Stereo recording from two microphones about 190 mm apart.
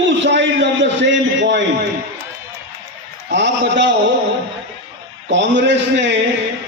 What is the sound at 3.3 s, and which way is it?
Speech, 70° right (ahead or behind).